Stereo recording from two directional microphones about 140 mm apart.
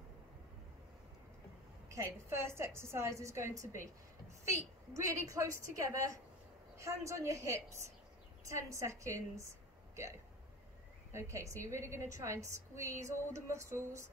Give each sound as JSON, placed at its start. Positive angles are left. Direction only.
{"t": 1.9, "sound": "a woman's voice", "side_deg": -20}
{"t": 11.1, "sound": "a woman's voice", "side_deg": -20}